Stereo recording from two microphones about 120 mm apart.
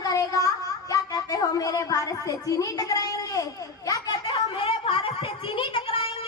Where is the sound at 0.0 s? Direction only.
30° left (ahead or behind).